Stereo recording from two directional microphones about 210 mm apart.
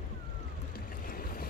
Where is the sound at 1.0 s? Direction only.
45° left (ahead or behind).